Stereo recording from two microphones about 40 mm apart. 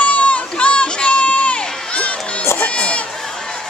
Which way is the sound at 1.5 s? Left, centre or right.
Left.